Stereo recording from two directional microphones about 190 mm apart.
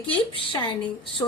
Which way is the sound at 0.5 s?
25° left (ahead or behind).